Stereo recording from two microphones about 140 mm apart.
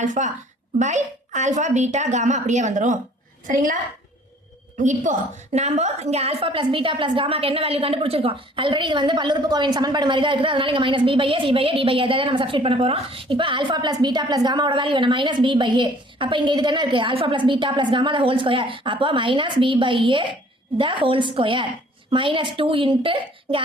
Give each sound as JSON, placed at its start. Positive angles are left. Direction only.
{"t": 0.0, "sound": "a woman's voice", "side_deg": -60}
{"t": 3.4, "sound": "a woman's voice", "side_deg": -75}
{"t": 4.8, "sound": "a woman's voice", "side_deg": -60}